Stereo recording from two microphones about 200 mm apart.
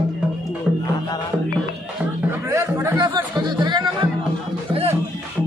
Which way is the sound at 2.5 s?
15° right (ahead or behind).